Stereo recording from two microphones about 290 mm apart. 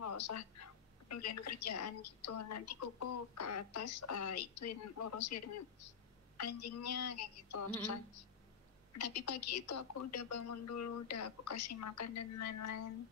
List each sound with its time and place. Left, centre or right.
0.0 s a woman's voice: left
8.9 s a woman's voice: left